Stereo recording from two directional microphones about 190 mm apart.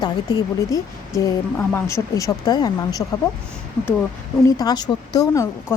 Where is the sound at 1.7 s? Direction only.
15° left (ahead or behind).